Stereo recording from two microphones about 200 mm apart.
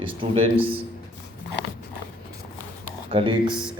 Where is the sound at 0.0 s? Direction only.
25° right (ahead or behind).